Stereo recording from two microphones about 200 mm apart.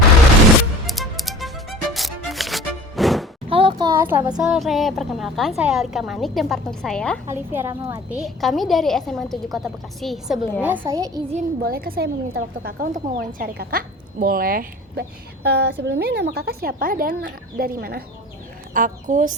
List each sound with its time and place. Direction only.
0.9 s music: centre (ahead or behind)
3.5 s a sound: 25° right (ahead or behind); by 4.3 s 10° right (ahead or behind)
4.4 s a woman's voice: 5° right (ahead or behind)
7.3 s a woman's voice: 10° right (ahead or behind)
8.2 s a woman's voice: centre (ahead or behind)
10.6 s a woman's voice: 10° right (ahead or behind)
11.6 s a woman's voice: 50° right (ahead or behind)